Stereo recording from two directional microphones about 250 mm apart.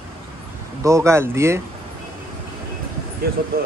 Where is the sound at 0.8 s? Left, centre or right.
Centre.